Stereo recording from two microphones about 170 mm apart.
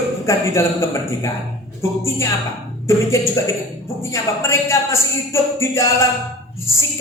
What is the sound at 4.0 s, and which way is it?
Speech, 15° left (ahead or behind).